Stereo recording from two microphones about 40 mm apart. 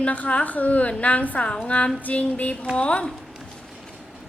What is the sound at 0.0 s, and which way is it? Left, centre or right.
A woman's voice, left.